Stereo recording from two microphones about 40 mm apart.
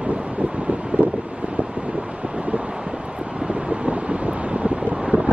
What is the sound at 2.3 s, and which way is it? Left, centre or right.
Vehicle, right.